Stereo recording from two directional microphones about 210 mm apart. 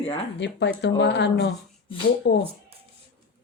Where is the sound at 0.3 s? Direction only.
55° left (ahead or behind).